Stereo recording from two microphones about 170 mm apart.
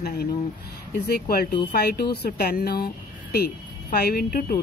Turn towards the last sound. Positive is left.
turn(degrees=55)  # may be behind; listen again after turning